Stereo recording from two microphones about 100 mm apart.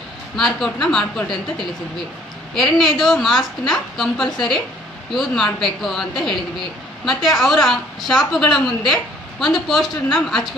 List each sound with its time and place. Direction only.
0.4 s a woman's voice: centre (ahead or behind)